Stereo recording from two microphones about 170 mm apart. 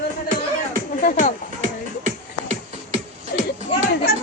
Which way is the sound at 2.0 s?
40° right (ahead or behind).